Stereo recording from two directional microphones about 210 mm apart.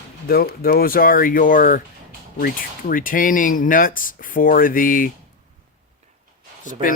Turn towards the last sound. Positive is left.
turn(degrees=40)  # may be behind; listen again after turning